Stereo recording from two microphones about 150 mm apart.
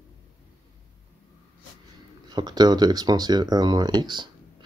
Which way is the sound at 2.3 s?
25° right (ahead or behind).